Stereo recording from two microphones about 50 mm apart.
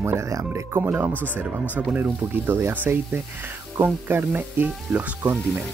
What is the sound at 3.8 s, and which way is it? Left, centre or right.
Speech, right.